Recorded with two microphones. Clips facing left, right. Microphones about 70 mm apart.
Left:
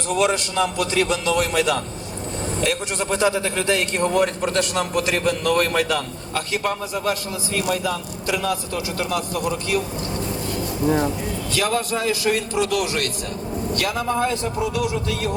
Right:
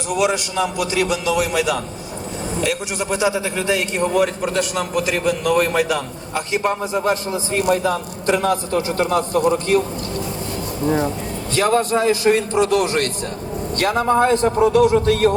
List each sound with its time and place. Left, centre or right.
0.1 s a man's voice: centre
6.5 s a man's voice: right
11.5 s a man's voice: right